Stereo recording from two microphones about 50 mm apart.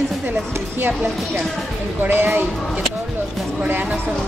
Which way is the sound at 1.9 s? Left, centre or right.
Right.